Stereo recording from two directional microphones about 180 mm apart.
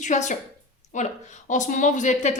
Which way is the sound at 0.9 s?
45° left (ahead or behind).